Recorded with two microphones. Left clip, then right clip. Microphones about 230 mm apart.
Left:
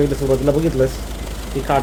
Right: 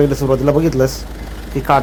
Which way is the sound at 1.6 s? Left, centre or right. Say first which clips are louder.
Right 4 dB; centre.